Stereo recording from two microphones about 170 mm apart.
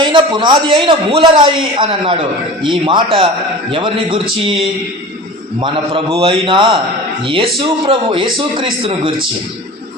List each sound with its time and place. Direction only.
0.0 s a man's voice: 30° right (ahead or behind)
5.5 s a man's voice: 30° right (ahead or behind)